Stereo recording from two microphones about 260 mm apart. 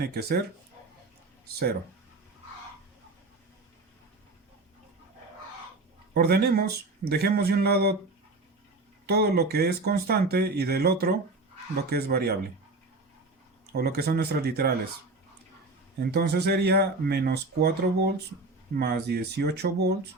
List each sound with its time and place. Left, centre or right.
0.0 s speech: right
6.1 s speech: right
9.0 s speech: right
13.7 s speech: right
16.0 s speech: right